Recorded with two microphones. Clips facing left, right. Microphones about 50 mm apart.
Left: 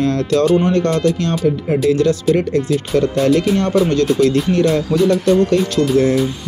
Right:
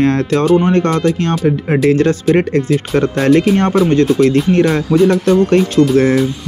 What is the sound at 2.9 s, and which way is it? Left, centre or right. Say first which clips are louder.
Speech: right 2 dB; right.